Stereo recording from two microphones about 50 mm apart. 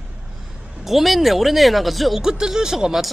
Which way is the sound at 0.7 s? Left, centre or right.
Centre.